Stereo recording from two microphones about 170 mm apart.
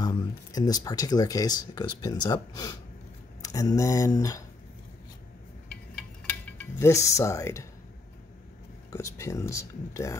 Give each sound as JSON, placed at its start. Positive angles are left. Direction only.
{"t": 0.0, "sound": "speech", "side_deg": 20}
{"t": 5.9, "sound": "a sound", "side_deg": 10}
{"t": 8.9, "sound": "speech", "side_deg": 15}